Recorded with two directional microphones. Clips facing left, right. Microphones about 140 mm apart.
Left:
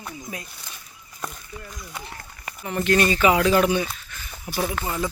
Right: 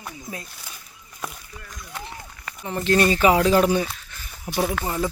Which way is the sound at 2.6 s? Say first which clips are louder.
Right 1 dB; 30° right (ahead or behind).